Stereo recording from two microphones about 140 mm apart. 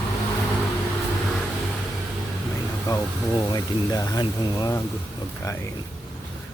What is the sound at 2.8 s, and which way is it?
Speech, 25° left (ahead or behind).